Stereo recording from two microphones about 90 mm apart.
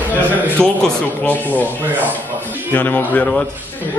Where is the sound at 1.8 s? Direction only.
20° right (ahead or behind).